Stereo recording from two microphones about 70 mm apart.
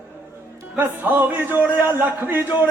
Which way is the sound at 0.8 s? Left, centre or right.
Right.